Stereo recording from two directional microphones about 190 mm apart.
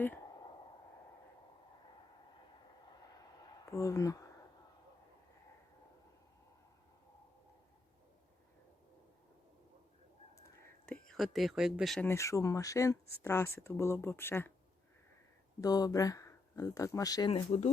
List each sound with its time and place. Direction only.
3.3 s a sound: 15° left (ahead or behind)
11.1 s speech: centre (ahead or behind)
12.0 s speech: 15° left (ahead or behind)
15.6 s speech: 20° left (ahead or behind)